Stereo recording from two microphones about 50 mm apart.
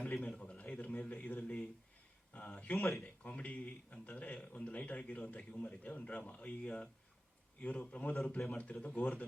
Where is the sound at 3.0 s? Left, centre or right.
Left.